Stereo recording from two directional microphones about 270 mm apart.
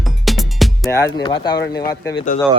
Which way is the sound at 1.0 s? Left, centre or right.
Centre.